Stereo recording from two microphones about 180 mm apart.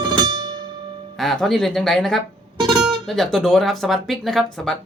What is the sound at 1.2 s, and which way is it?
Speech, centre (ahead or behind).